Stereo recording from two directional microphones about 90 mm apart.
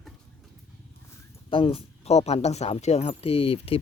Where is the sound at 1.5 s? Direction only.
85° left.